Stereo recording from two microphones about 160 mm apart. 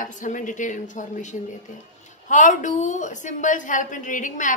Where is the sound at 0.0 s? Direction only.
55° left (ahead or behind).